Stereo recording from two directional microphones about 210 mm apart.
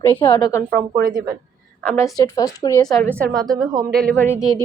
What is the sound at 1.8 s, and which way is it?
Speech, 5° left (ahead or behind).